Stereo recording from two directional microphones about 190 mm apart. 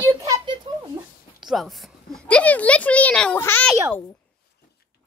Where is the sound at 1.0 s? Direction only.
15° right (ahead or behind).